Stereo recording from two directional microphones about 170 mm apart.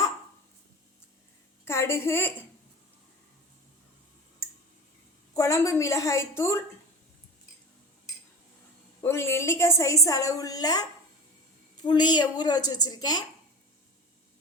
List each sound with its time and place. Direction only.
1.6 s a woman's voice: 15° left (ahead or behind)
5.4 s a woman's voice: 20° left (ahead or behind)
9.0 s a woman's voice: 15° left (ahead or behind)